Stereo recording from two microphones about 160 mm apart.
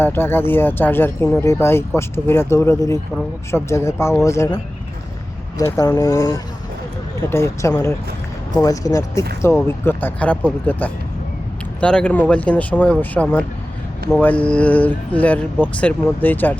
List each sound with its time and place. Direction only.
0.0 s speech: 15° left (ahead or behind)